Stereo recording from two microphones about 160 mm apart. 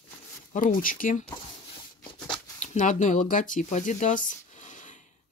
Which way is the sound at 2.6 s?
50° left (ahead or behind).